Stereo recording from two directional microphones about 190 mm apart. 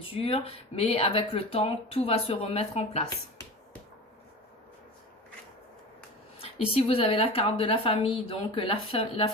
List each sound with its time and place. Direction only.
0.0 s speech: 30° left (ahead or behind)
6.4 s a woman's voice: 30° left (ahead or behind)